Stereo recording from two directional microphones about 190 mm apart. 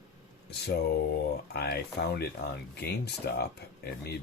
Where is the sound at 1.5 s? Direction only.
55° left (ahead or behind).